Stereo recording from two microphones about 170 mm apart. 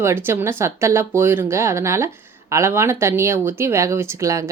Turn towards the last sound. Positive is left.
turn(degrees=-20)  # may be behind; listen again after turning